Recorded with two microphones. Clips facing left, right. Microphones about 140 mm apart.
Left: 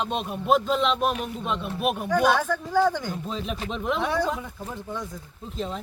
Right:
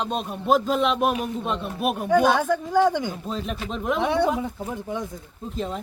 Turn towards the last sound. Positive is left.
turn(degrees=-5)  # may be behind; listen again after turning